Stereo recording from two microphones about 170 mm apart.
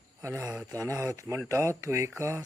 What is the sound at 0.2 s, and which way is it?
Speech, 15° right (ahead or behind).